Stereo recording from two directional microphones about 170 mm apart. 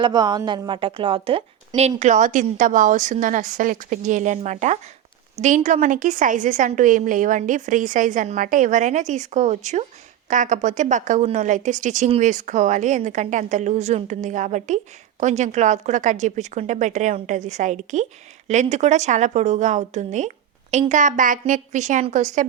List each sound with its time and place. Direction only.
0.0 s a woman's voice: 25° right (ahead or behind); by 22.4 s 45° right (ahead or behind)